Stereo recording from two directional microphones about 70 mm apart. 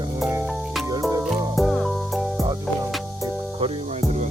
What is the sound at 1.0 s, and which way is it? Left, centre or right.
Music, right.